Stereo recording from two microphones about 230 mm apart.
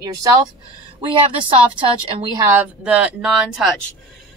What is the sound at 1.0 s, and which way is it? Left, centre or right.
Speech, right.